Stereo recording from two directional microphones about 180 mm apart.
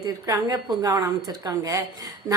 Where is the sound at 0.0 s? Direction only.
20° right (ahead or behind).